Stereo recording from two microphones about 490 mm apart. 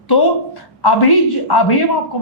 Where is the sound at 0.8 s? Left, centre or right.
Left.